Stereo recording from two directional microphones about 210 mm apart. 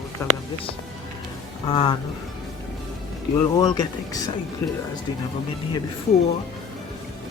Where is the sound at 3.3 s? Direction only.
15° left (ahead or behind).